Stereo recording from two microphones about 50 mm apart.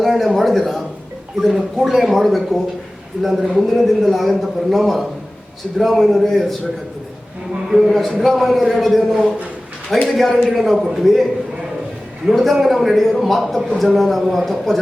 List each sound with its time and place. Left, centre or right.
0.0 s a man's voice: centre
7.7 s a man's voice: centre